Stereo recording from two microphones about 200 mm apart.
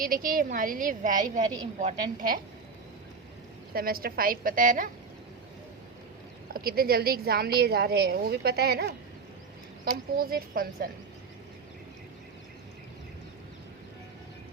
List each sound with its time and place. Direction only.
0.0 s a woman's voice: 45° right (ahead or behind)
3.7 s a woman's voice: 50° right (ahead or behind)
6.5 s a woman's voice: 50° right (ahead or behind)